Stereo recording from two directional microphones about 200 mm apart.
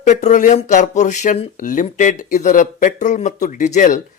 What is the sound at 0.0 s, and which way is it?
Speech, 35° left (ahead or behind).